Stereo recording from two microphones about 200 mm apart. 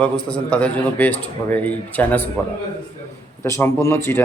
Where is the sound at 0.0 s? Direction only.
5° left (ahead or behind).